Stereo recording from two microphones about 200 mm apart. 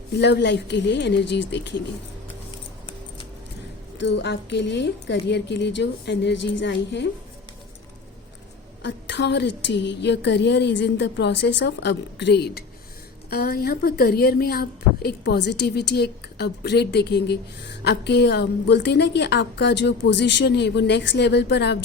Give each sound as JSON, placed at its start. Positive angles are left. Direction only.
{"t": 0.2, "sound": "a woman's voice", "side_deg": 60}
{"t": 3.9, "sound": "a woman's voice", "side_deg": 60}
{"t": 8.8, "sound": "a woman's voice", "side_deg": 60}